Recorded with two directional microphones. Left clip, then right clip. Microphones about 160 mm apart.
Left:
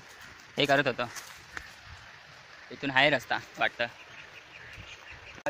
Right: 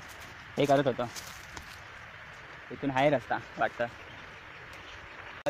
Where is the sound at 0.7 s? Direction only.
30° left (ahead or behind).